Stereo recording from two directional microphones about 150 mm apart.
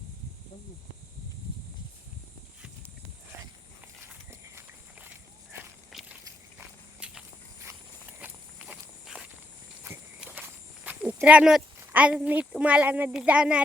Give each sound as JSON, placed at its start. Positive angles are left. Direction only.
{"t": 3.3, "sound": "walk", "side_deg": -20}
{"t": 5.9, "sound": "walk", "side_deg": 0}
{"t": 10.8, "sound": "speech", "side_deg": -10}